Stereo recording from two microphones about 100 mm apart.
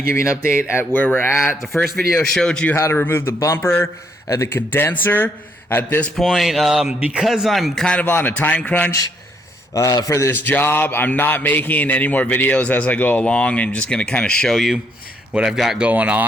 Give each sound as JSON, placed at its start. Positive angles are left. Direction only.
{"t": 0.1, "sound": "a man's voice", "side_deg": 30}
{"t": 1.6, "sound": "a man's voice", "side_deg": 0}
{"t": 2.7, "sound": "a man's voice", "side_deg": 25}
{"t": 6.1, "sound": "speech", "side_deg": 0}
{"t": 7.9, "sound": "a man's voice", "side_deg": 15}
{"t": 9.7, "sound": "a man's voice", "side_deg": 35}
{"t": 10.4, "sound": "a man's voice", "side_deg": 20}
{"t": 15.9, "sound": "speech", "side_deg": -15}